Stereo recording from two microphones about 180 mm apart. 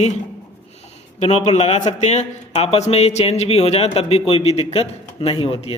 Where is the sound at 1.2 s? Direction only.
35° left (ahead or behind).